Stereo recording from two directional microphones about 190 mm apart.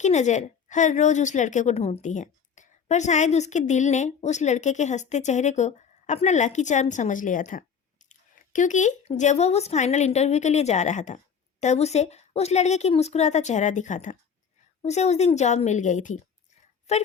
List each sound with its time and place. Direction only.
0.0 s a woman's voice: 40° left (ahead or behind)